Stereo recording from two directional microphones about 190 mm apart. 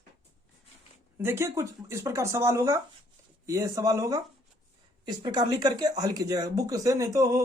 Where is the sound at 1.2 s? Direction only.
15° right (ahead or behind).